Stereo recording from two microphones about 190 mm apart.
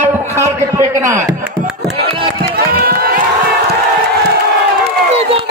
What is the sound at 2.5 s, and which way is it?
Run, 50° right (ahead or behind).